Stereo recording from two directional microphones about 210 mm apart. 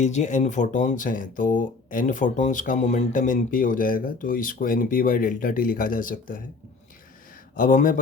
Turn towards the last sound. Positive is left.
turn(degrees=40)  # may be behind; listen again after turning